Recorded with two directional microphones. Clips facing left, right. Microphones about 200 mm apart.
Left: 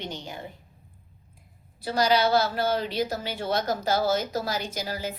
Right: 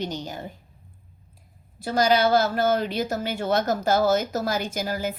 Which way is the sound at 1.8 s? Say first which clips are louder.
Right 2 dB; 50° right (ahead or behind).